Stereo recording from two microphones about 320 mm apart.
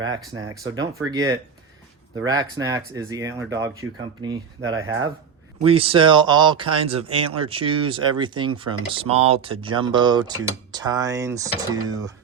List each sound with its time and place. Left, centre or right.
0.1 s speech: centre
4.6 s speech: right
5.6 s speech: centre